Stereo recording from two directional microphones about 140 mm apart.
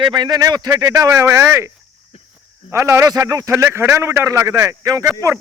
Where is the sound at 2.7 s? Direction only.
20° right (ahead or behind).